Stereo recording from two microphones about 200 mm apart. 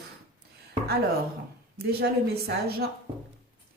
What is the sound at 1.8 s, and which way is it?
A woman's voice, 50° right (ahead or behind).